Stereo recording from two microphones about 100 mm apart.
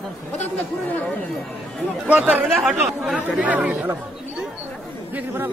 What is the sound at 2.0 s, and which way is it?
Speech, 15° right (ahead or behind).